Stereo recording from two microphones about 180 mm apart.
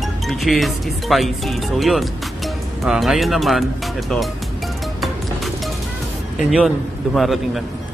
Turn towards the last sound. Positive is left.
turn(degrees=0)  # may be behind; listen again after turning